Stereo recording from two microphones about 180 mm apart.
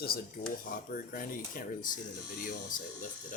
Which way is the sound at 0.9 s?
50° left (ahead or behind).